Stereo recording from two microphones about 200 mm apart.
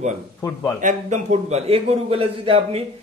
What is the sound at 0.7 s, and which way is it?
A man's voice, 40° right (ahead or behind).